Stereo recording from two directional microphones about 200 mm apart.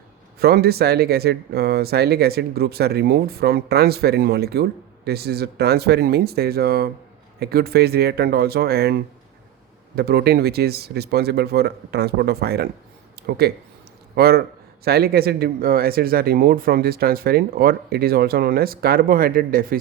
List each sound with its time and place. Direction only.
0.3 s speech: 50° right (ahead or behind)